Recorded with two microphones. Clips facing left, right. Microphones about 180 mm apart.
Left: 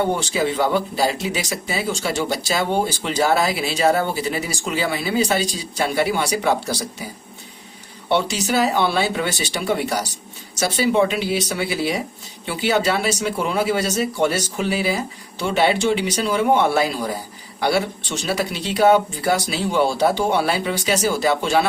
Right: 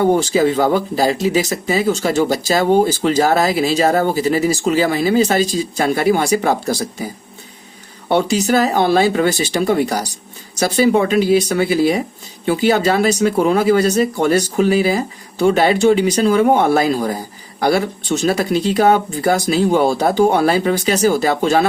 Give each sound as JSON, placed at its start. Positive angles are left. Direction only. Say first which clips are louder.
{"t": 0.0, "sound": "speech", "louder": "right 7 dB", "side_deg": -40}
{"t": 8.1, "sound": "speech", "louder": "right 5 dB", "side_deg": -40}
{"t": 11.1, "sound": "speech", "louder": "right 9 dB", "side_deg": -45}